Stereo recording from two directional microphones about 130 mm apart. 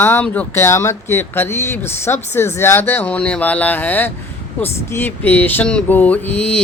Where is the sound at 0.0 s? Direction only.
15° left (ahead or behind).